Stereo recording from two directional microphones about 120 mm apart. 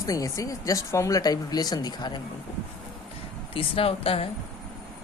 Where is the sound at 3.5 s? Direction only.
50° left (ahead or behind).